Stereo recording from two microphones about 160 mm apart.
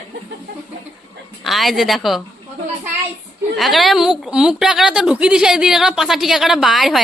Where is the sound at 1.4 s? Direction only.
Centre (ahead or behind).